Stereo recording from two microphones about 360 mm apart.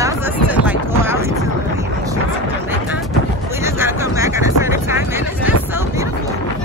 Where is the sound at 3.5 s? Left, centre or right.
Centre.